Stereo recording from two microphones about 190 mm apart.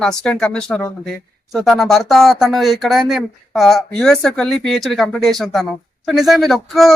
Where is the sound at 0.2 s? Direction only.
5° left (ahead or behind).